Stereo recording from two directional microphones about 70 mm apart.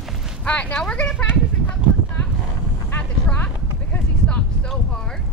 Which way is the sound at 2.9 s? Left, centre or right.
Left.